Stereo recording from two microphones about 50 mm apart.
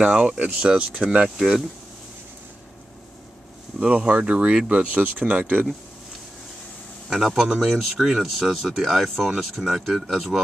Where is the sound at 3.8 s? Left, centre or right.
Right.